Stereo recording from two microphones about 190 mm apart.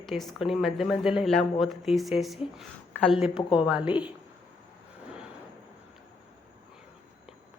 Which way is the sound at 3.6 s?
5° right (ahead or behind).